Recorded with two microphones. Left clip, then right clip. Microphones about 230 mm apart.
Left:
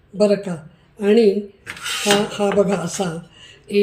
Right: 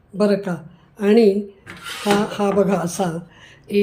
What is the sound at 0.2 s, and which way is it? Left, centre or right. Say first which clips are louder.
Speech: left 2 dB; centre.